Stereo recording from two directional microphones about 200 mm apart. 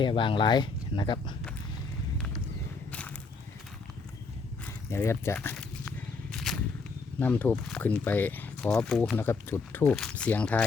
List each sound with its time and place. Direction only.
0.0 s speech: 25° left (ahead or behind)
4.6 s a sound: 15° left (ahead or behind)
6.3 s wild animals: centre (ahead or behind)
7.2 s speech: 10° left (ahead or behind)